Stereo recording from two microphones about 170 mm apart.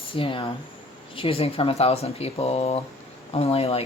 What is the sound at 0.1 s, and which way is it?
Speech, 30° left (ahead or behind).